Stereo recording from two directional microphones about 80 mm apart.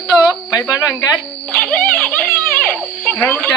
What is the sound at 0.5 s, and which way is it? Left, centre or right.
Speech, left.